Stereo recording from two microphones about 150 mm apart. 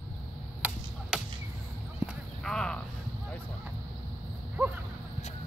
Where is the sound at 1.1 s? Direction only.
5° right (ahead or behind).